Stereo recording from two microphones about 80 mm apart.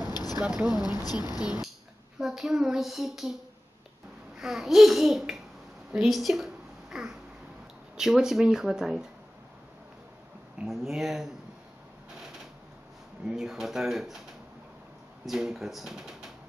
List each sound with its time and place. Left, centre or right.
0.1 s a sound: left
0.4 s speech: centre
4.4 s a woman's voice: centre
10.6 s speech: centre
13.2 s speech: centre
15.2 s speech: centre